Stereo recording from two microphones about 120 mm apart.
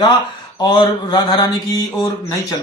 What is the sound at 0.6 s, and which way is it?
Speech, 35° left (ahead or behind).